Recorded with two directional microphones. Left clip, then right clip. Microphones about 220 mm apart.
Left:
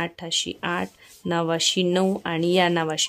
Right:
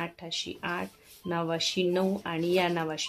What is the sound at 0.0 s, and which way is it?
Speech, 50° left (ahead or behind).